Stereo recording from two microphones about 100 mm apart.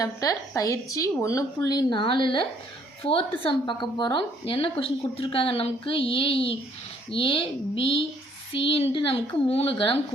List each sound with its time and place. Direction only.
0.0 s a woman's voice: 35° left (ahead or behind)
1.7 s speech: 50° left (ahead or behind)
3.0 s speech: 70° left (ahead or behind)